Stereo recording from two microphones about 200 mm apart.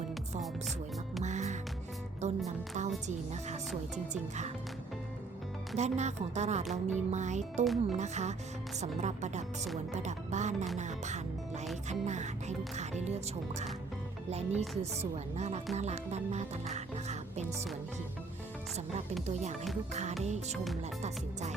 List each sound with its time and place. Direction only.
1.2 s music: 35° right (ahead or behind)
2.2 s speech: 35° right (ahead or behind)
3.9 s speech: 35° right (ahead or behind)
5.7 s speech: 35° right (ahead or behind)
7.6 s speech: centre (ahead or behind)
7.9 s speech: 35° right (ahead or behind)
14.5 s speech: centre (ahead or behind)
14.8 s speech: 30° right (ahead or behind)
19.9 s speech: 35° right (ahead or behind)